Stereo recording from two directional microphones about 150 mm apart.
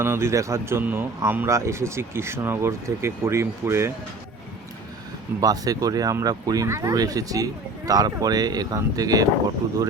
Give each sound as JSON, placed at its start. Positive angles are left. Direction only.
{"t": 0.0, "sound": "speech", "side_deg": -15}
{"t": 5.4, "sound": "speech", "side_deg": -25}